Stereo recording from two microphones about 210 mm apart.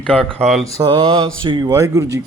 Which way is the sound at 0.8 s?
20° right (ahead or behind).